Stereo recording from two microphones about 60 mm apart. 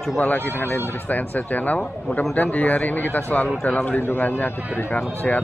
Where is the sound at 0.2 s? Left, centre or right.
Left.